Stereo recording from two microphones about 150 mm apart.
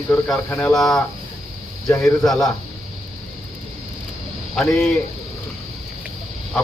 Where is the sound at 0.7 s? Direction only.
Centre (ahead or behind).